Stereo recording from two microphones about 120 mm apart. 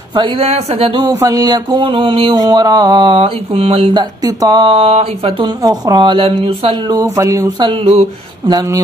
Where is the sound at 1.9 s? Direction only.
45° right (ahead or behind).